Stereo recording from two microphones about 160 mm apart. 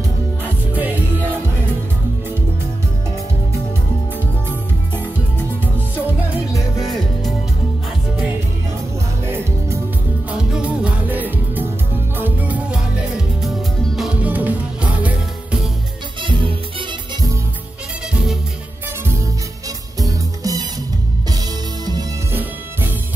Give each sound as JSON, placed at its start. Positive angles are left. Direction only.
{"t": 0.4, "sound": "music", "side_deg": -10}
{"t": 9.2, "sound": "music", "side_deg": -15}
{"t": 16.2, "sound": "music", "side_deg": -30}
{"t": 20.0, "sound": "music", "side_deg": -20}
{"t": 22.3, "sound": "music", "side_deg": -15}